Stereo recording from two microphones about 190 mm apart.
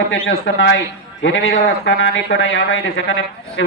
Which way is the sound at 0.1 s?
80° left.